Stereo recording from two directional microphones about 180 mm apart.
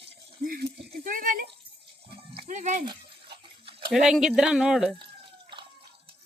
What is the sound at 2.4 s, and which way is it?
Speech, 45° right (ahead or behind).